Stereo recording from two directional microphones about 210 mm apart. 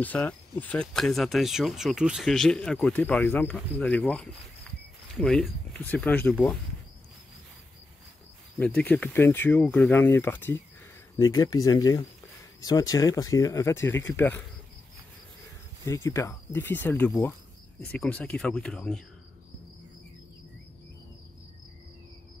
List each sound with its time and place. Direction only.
0.0 s speech: 5° left (ahead or behind)
8.5 s speech: 5° left (ahead or behind)
15.8 s speech: 15° left (ahead or behind)